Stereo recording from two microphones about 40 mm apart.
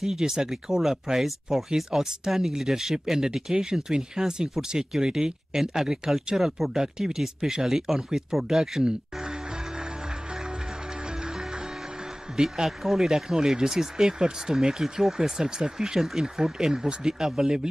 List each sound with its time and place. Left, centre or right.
0.0 s speech: centre
8.8 s music: centre
11.1 s music: centre
12.6 s speech: centre
16.0 s speech: centre